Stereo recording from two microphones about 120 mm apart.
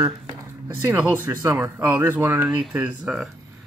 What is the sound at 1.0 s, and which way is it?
Speech, 15° right (ahead or behind).